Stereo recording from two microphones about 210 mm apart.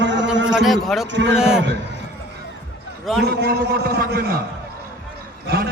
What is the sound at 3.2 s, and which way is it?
Speech, 50° right (ahead or behind).